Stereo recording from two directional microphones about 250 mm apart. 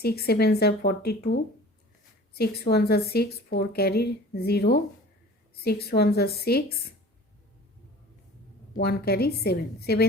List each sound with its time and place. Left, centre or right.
0.0 s a woman's voice: left
8.7 s a woman's voice: left